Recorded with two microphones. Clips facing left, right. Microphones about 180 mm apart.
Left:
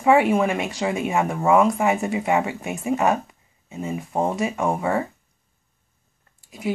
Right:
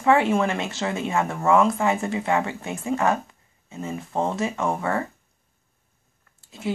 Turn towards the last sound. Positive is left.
turn(degrees=15)  # may be behind; listen again after turning